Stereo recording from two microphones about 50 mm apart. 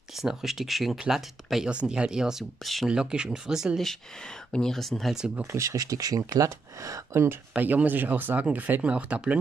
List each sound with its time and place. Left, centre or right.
0.2 s speech: centre
2.6 s speech: centre
2.9 s speech: centre
4.5 s speech: centre
4.7 s speech: centre
5.5 s speech: right
7.2 s speech: right
8.8 s speech: right